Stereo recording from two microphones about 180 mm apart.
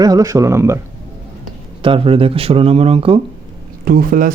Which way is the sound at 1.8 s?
30° right (ahead or behind).